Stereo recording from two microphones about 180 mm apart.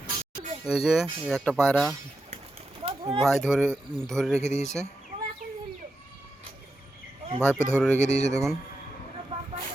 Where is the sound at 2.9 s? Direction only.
35° right (ahead or behind).